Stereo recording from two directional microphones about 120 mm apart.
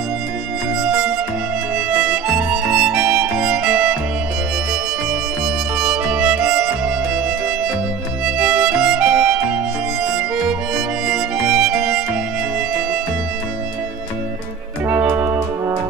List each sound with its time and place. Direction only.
0.8 s music: 5° right (ahead or behind)
2.0 s harmonica: 5° right (ahead or behind)
5.8 s music: 5° right (ahead or behind)
8.4 s music: 5° right (ahead or behind)
11.1 s music: 5° right (ahead or behind)
14.9 s music: 15° right (ahead or behind)